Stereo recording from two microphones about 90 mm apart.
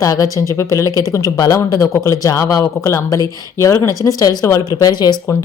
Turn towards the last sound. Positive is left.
turn(degrees=50)  # may be behind; listen again after turning